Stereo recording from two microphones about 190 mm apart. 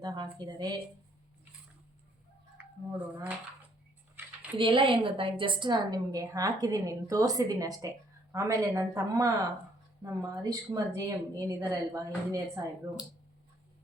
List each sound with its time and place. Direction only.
0.0 s a woman's voice: 20° right (ahead or behind)
2.6 s speech: 10° right (ahead or behind)
4.5 s a woman's voice: 25° right (ahead or behind)